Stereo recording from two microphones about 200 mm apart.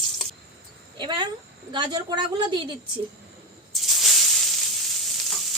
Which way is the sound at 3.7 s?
Centre (ahead or behind).